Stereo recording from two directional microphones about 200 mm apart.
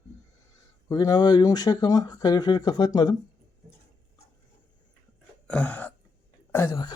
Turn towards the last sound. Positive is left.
turn(degrees=15)  # may be behind; listen again after turning